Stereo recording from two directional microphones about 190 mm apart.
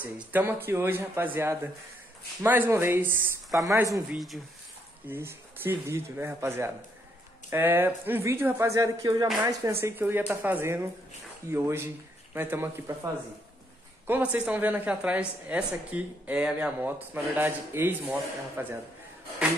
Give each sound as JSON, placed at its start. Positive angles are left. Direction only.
{"t": 0.0, "sound": "a woman's voice", "side_deg": -10}
{"t": 4.1, "sound": "speech", "side_deg": 0}
{"t": 5.0, "sound": "a woman's voice", "side_deg": -10}